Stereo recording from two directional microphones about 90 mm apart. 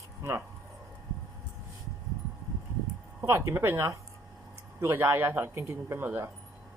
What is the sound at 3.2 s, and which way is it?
Speech, 25° right (ahead or behind).